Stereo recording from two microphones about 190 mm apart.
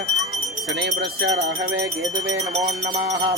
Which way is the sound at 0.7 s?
70° right (ahead or behind).